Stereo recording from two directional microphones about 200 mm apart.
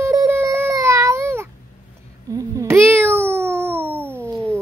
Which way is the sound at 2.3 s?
15° right (ahead or behind).